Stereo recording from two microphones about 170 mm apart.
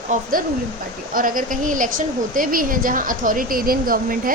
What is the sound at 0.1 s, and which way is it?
A woman's voice, 55° right (ahead or behind).